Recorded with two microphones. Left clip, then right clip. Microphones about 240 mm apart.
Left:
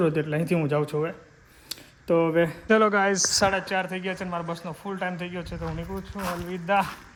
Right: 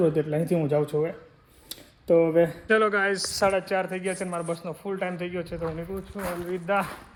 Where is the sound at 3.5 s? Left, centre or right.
Centre.